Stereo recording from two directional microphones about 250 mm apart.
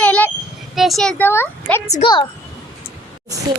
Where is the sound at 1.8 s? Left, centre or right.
Left.